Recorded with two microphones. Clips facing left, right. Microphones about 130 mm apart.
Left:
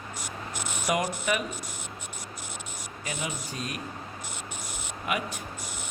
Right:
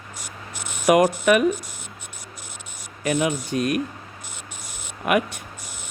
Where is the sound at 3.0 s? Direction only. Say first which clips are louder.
Right 13 dB; 70° right (ahead or behind).